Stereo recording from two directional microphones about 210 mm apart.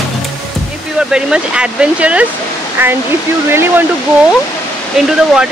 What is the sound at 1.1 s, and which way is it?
Speech, 5° right (ahead or behind).